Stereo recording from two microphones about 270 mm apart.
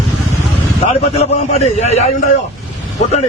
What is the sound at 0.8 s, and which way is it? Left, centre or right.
A man's voice, left.